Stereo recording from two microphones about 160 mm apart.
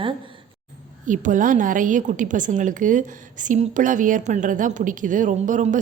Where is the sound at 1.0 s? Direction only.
55° right (ahead or behind).